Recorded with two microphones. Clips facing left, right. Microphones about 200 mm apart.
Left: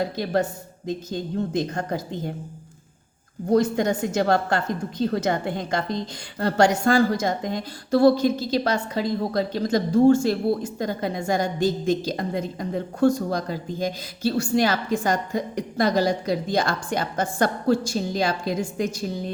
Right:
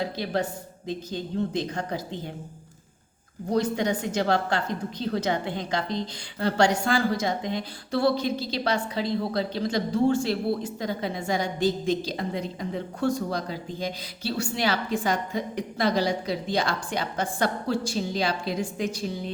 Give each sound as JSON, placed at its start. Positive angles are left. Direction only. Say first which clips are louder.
{"t": 0.9, "sound": "speech", "louder": "left 3 dB", "side_deg": 45}
{"t": 3.5, "sound": "speech", "louder": "left 4 dB", "side_deg": 45}